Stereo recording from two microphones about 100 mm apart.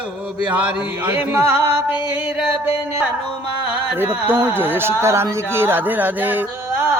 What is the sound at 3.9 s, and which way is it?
Speech, 20° right (ahead or behind).